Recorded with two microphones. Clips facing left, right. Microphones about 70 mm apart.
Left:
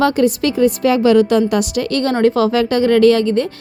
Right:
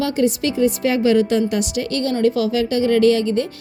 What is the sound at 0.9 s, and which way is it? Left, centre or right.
A woman's voice, left.